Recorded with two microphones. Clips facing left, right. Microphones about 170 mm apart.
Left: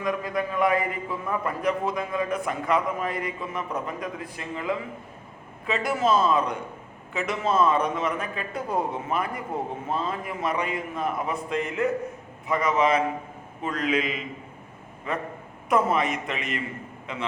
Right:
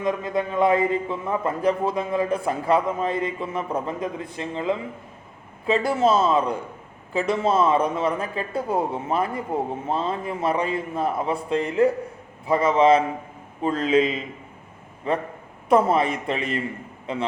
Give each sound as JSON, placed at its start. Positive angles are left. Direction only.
{"t": 0.0, "sound": "a man's voice", "side_deg": -25}